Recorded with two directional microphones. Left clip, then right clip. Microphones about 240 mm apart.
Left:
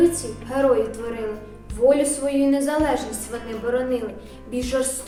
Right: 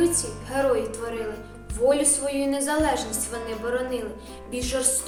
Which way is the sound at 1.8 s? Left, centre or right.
Centre.